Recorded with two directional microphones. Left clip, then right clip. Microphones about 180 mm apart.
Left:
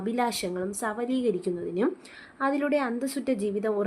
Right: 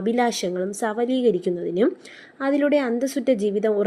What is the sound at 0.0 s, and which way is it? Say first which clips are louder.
A woman's voice: right 6 dB; 20° right (ahead or behind).